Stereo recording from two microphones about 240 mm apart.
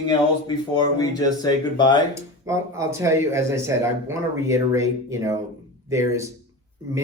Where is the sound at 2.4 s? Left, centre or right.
Centre.